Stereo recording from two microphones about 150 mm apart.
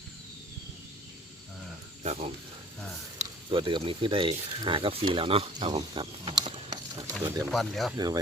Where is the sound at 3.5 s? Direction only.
35° right (ahead or behind).